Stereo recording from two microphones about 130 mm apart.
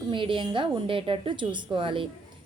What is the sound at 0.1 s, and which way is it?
A woman's voice, 40° right (ahead or behind).